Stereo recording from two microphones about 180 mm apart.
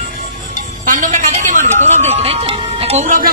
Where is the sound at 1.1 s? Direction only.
45° right (ahead or behind).